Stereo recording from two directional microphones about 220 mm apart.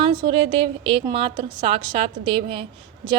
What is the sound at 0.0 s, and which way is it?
A woman's voice, 20° right (ahead or behind).